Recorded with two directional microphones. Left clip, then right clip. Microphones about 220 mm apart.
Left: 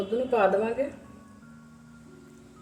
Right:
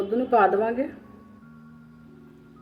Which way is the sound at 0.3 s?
35° right (ahead or behind).